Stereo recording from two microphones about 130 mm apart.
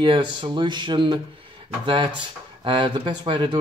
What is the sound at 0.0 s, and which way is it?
Speech, 40° right (ahead or behind).